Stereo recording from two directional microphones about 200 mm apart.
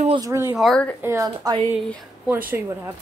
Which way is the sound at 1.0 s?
15° right (ahead or behind).